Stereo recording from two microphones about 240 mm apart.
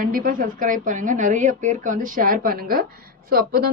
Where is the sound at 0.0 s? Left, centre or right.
Right.